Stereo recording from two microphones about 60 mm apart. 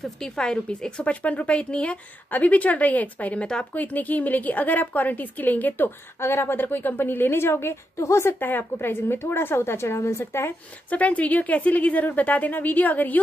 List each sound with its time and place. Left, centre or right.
0.0 s a woman's voice: centre; by 5.9 s left
6.2 s a woman's voice: left
10.9 s speech: left